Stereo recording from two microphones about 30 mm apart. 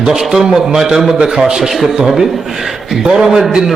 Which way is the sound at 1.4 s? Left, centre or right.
Centre.